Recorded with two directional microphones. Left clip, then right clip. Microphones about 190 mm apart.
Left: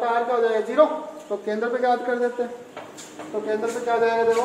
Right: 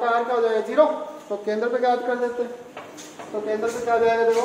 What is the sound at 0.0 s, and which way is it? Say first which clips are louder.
A man's voice: even; 15° right (ahead or behind).